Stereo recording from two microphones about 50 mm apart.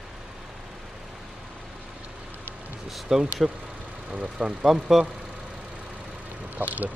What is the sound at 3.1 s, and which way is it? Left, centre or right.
Speech, centre.